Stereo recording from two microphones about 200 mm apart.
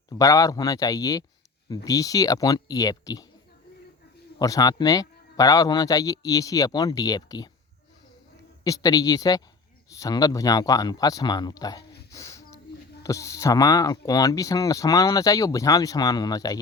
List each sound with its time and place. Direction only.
0.1 s speech: 15° left (ahead or behind)
4.4 s speech: 15° left (ahead or behind)
8.6 s speech: 20° left (ahead or behind)